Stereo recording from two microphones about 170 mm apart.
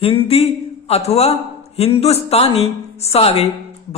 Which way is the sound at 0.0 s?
35° left (ahead or behind).